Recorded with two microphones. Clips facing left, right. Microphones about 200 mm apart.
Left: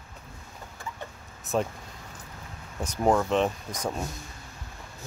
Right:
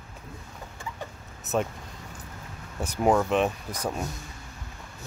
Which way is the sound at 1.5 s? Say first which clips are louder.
Even; centre (ahead or behind).